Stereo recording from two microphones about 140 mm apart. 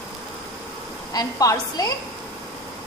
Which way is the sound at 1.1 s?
25° left (ahead or behind).